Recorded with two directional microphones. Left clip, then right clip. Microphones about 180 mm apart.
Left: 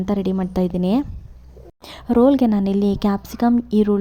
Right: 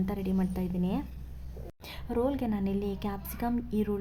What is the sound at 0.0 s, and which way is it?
A woman's voice, 35° left (ahead or behind).